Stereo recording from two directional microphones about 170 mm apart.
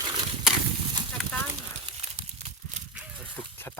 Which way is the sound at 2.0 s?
40° right (ahead or behind).